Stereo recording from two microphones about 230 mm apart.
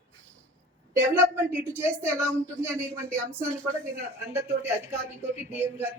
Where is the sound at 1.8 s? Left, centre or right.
Centre.